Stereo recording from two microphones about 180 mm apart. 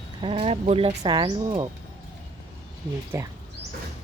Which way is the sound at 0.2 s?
30° right (ahead or behind).